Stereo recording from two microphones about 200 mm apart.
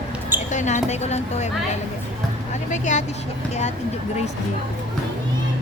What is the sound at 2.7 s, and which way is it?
Speech, 35° left (ahead or behind).